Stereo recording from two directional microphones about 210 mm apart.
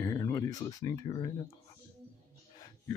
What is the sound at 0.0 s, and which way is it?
Speech, 15° left (ahead or behind).